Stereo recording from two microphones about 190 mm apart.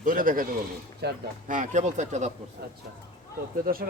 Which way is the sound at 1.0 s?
55° right (ahead or behind).